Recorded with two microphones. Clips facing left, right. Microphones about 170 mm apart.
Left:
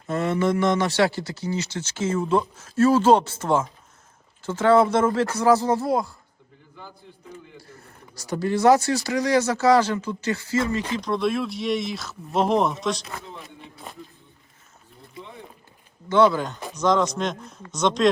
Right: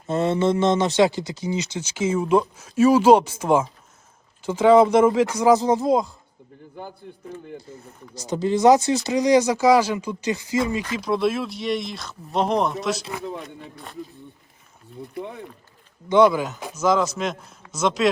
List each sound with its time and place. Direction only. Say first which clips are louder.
0.1 s speech: right 2 dB; 25° right (ahead or behind)
7.0 s a man's voice: right 7 dB; 55° right (ahead or behind)
7.7 s speech: right 6 dB; 20° right (ahead or behind)
15.1 s a sound: right 8 dB; 60° right (ahead or behind)
16.0 s speech: right 2 dB; 15° right (ahead or behind)